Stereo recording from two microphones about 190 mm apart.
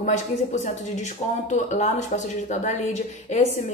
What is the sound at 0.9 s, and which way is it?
A woman's voice, 40° left (ahead or behind).